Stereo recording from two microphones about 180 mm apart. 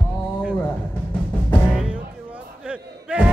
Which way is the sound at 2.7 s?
5° right (ahead or behind).